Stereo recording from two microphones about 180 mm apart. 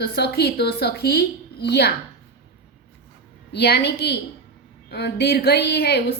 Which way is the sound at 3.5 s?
65° left (ahead or behind).